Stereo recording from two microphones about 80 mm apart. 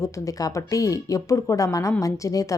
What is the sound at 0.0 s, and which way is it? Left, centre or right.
A woman's voice, left.